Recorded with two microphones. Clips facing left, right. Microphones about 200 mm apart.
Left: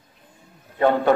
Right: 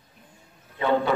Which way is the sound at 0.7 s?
50° left (ahead or behind).